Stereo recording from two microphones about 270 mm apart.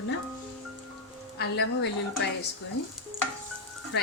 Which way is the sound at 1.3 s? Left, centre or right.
Left.